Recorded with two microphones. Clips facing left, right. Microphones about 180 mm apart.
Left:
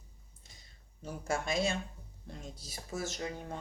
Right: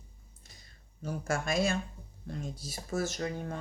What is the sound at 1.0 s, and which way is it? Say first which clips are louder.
Speech: right 2 dB; 25° left (ahead or behind).